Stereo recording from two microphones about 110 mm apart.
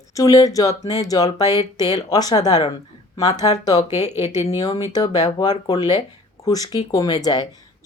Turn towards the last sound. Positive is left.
turn(degrees=35)  # may be behind; listen again after turning